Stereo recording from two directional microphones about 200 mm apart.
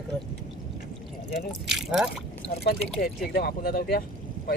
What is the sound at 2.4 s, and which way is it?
Speech, 50° left (ahead or behind).